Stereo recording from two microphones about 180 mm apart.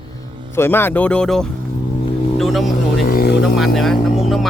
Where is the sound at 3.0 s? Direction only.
60° left (ahead or behind).